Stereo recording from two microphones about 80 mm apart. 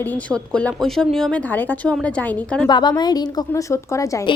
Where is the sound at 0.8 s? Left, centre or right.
Centre.